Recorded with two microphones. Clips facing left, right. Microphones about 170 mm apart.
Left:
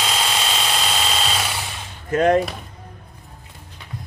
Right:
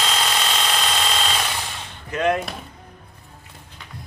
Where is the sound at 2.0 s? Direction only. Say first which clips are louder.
Left 5 dB; 40° left (ahead or behind).